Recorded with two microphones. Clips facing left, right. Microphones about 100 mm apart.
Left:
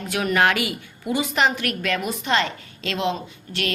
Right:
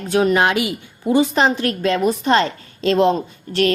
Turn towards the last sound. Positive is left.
turn(degrees=-40)  # may be behind; listen again after turning